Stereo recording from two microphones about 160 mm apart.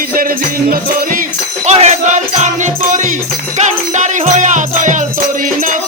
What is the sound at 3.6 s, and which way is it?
Music, 50° right (ahead or behind).